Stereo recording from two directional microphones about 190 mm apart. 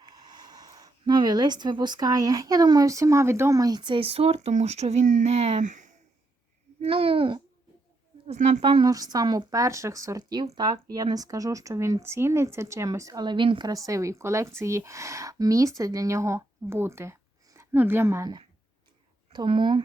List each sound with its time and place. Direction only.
0.1 s speech: 20° right (ahead or behind); by 5.9 s 40° right (ahead or behind)
6.8 s speech: 30° right (ahead or behind)
8.3 s speech: 40° right (ahead or behind)